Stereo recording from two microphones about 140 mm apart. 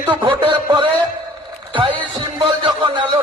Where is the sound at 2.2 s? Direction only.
35° right (ahead or behind).